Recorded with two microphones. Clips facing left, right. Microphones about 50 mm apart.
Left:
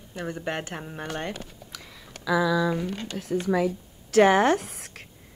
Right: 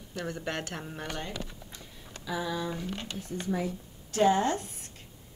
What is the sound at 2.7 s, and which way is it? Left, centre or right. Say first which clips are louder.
Speech: left 7 dB; left.